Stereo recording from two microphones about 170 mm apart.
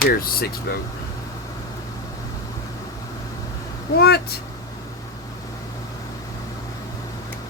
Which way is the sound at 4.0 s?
70° left (ahead or behind).